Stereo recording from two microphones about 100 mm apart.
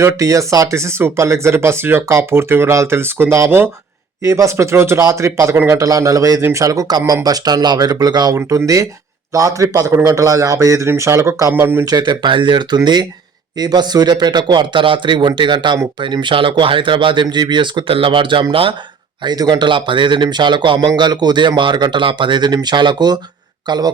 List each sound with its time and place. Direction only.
0.0 s a man's voice: 30° right (ahead or behind)
8.4 s a man's voice: 30° right (ahead or behind)
11.9 s speech: 50° right (ahead or behind)
19.2 s speech: 45° right (ahead or behind)